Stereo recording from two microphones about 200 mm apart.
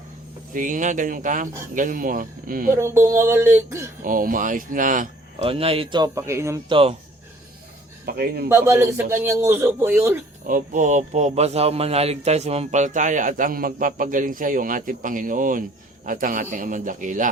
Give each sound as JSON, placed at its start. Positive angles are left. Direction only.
{"t": 0.5, "sound": "speech", "side_deg": -40}
{"t": 2.7, "sound": "a man's voice", "side_deg": -15}
{"t": 4.0, "sound": "speech", "side_deg": -45}
{"t": 5.5, "sound": "a man's voice", "side_deg": -30}
{"t": 8.0, "sound": "speech", "side_deg": -50}
{"t": 8.4, "sound": "a man's voice", "side_deg": -15}
{"t": 10.4, "sound": "speech", "side_deg": -40}